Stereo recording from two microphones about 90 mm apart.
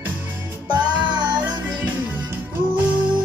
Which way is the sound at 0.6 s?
55° right (ahead or behind).